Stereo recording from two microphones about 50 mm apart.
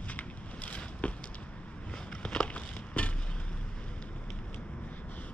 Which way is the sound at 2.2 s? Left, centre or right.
Left.